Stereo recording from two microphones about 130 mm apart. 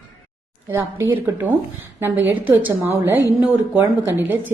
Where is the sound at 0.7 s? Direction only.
15° right (ahead or behind).